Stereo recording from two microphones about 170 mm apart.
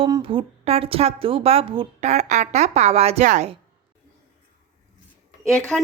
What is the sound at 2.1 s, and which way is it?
Speech, 45° right (ahead or behind).